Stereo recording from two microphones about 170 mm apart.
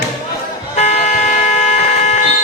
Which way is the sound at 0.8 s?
40° left (ahead or behind).